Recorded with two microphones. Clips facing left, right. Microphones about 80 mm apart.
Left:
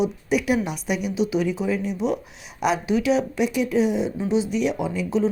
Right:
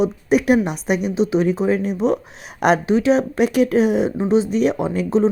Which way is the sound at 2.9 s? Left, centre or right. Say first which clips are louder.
Right 5 dB; right.